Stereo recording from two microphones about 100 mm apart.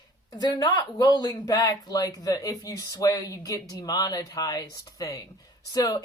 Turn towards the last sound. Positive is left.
turn(degrees=40)  # may be behind; listen again after turning